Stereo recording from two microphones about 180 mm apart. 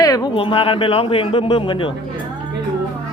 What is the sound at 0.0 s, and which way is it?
Speech, 25° left (ahead or behind).